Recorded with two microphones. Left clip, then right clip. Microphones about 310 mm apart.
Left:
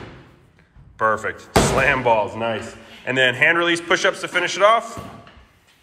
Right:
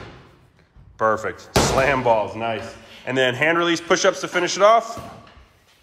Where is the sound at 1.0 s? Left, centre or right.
Centre.